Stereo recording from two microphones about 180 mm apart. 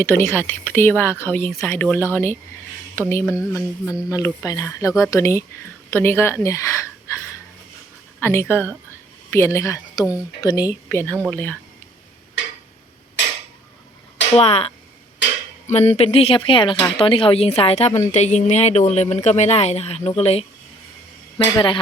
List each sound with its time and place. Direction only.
0.0 s speech: 10° left (ahead or behind)
8.2 s speech: 15° left (ahead or behind)
10.8 s speech: 10° left (ahead or behind)
12.4 s a sound: 80° left
14.3 s a woman's voice: 35° left (ahead or behind)
15.2 s a sound: 85° left
15.6 s a woman's voice: 35° left (ahead or behind)